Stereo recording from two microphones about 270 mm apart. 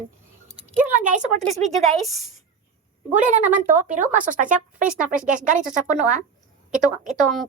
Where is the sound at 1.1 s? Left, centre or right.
Right.